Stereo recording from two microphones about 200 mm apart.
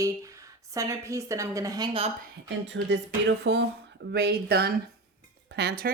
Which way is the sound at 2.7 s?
60° right (ahead or behind).